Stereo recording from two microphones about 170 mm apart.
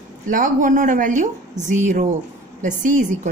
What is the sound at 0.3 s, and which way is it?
A woman's voice, 50° right (ahead or behind).